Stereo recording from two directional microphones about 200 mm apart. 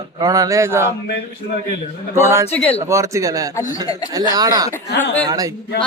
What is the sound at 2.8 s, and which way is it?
Speech, 15° right (ahead or behind).